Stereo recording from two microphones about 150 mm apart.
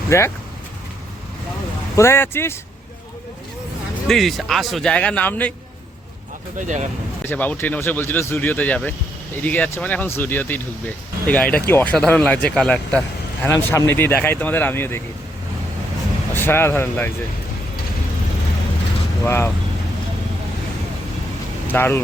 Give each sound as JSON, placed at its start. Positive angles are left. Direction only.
{"t": 0.1, "sound": "speech", "side_deg": 20}
{"t": 2.0, "sound": "speech", "side_deg": 15}
{"t": 4.1, "sound": "speech", "side_deg": 0}
{"t": 6.6, "sound": "speech", "side_deg": -55}
{"t": 7.3, "sound": "speech", "side_deg": 10}
{"t": 16.3, "sound": "speech", "side_deg": 15}
{"t": 19.2, "sound": "speech", "side_deg": 15}
{"t": 21.7, "sound": "speech", "side_deg": 15}